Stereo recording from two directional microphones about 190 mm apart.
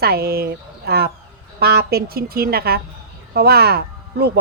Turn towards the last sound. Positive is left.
turn(degrees=-60)  # may be behind; listen again after turning